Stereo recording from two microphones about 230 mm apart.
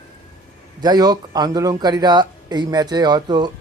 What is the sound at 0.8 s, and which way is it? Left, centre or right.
Speech, centre.